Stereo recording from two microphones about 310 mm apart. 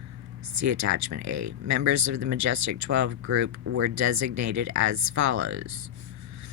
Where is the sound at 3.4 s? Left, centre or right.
Right.